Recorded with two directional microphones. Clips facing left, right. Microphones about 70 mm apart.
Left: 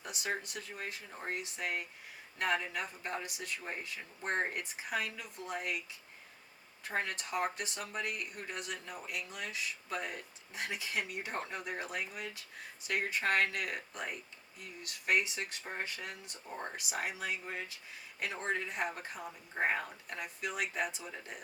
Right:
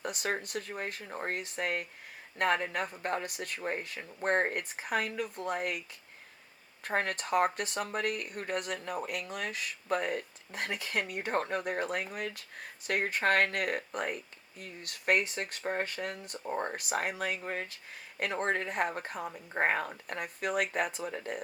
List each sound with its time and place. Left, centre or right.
0.0 s speech: right